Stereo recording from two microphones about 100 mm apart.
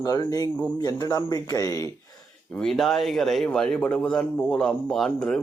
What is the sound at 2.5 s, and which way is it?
Speech, 5° left (ahead or behind).